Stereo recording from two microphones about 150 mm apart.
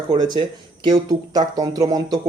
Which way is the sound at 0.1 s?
30° right (ahead or behind).